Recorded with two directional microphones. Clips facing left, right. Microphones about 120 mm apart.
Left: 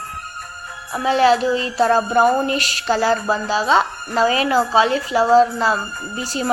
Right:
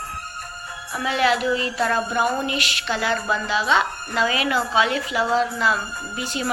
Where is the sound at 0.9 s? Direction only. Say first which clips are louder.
Left 6 dB; 30° left (ahead or behind).